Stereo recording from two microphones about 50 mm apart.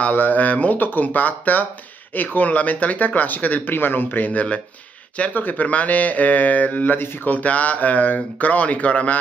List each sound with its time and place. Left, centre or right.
0.0 s speech: left